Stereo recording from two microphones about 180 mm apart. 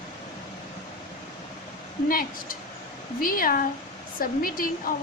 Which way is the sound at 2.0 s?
50° left (ahead or behind).